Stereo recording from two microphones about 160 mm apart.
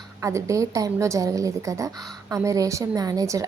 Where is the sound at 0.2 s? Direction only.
20° right (ahead or behind).